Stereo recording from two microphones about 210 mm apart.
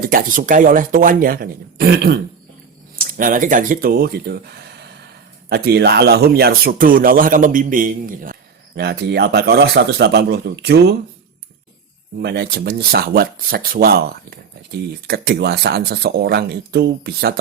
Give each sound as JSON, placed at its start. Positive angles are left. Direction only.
{"t": 0.0, "sound": "speech", "side_deg": -40}
{"t": 12.2, "sound": "speech", "side_deg": -50}